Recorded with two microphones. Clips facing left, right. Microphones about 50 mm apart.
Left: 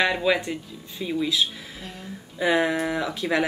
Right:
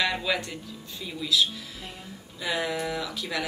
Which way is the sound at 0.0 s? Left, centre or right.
Left.